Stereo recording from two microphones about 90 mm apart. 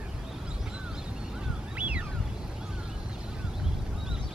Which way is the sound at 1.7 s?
15° right (ahead or behind).